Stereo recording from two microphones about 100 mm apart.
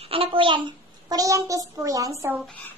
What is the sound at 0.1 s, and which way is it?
Speech, 65° right (ahead or behind).